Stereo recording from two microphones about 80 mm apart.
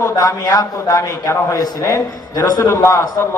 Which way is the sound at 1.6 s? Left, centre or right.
Left.